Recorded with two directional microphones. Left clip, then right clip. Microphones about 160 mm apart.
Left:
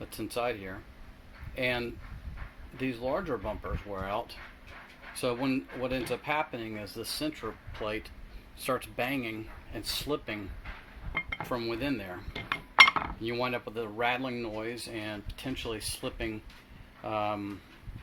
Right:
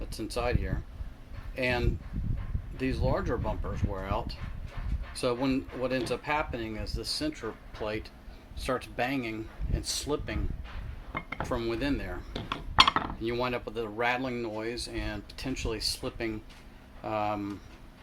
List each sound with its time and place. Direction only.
0.0 s speech: 15° left (ahead or behind)
5.2 s speech: 15° left (ahead or behind)
11.4 s speech: 15° left (ahead or behind)
12.5 s dishes: 20° right (ahead or behind)
13.2 s speech: 15° left (ahead or behind)